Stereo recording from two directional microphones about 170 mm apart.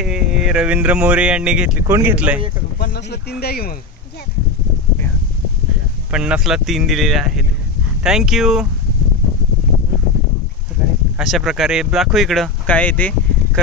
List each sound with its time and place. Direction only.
0.0 s speech: 5° right (ahead or behind)
2.8 s speech: 75° left (ahead or behind)
6.1 s speech: 5° right (ahead or behind)
11.1 s speech: centre (ahead or behind)